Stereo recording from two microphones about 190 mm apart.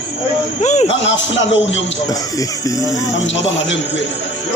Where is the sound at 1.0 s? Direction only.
75° left (ahead or behind).